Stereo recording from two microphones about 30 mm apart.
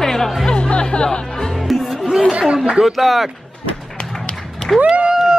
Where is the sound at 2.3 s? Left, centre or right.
Right.